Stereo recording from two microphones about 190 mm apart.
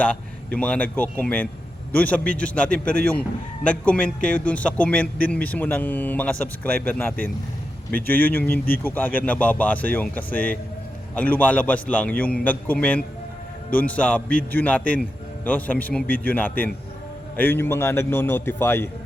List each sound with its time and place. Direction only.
0.0 s a man's voice: 5° left (ahead or behind)